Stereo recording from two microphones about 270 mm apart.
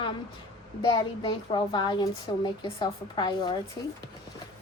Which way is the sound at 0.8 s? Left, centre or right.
Centre.